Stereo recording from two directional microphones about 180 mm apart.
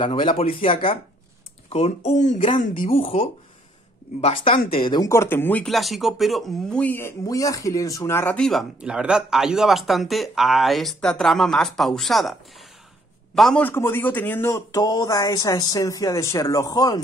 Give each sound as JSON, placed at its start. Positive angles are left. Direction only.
{"t": 0.0, "sound": "a man's voice", "side_deg": 30}